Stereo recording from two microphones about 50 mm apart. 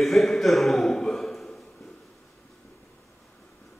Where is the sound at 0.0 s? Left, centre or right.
Centre.